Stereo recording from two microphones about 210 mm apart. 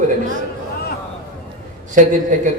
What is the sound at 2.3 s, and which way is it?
Speech, 40° right (ahead or behind).